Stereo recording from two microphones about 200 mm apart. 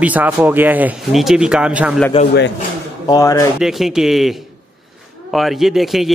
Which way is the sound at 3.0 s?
20° left (ahead or behind).